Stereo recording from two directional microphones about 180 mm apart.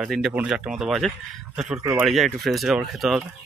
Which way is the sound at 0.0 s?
5° right (ahead or behind).